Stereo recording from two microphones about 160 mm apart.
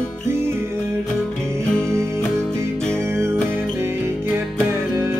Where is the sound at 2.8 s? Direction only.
5° left (ahead or behind).